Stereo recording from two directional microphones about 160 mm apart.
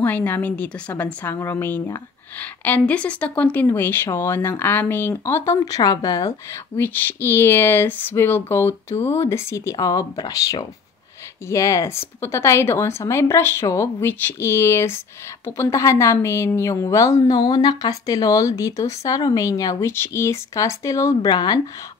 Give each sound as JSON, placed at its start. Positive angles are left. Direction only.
{"t": 0.0, "sound": "a woman's voice", "side_deg": 10}